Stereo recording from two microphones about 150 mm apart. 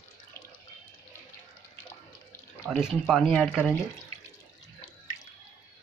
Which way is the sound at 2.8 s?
5° right (ahead or behind).